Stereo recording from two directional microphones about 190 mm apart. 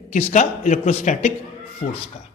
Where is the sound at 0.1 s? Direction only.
35° left (ahead or behind).